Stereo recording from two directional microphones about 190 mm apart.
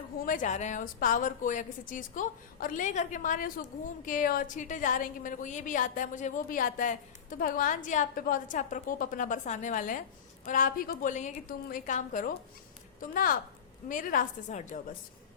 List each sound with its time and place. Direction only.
0.3 s a woman's voice: 40° left (ahead or behind)